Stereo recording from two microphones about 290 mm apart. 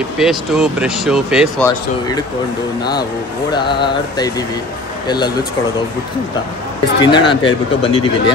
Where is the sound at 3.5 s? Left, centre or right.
Centre.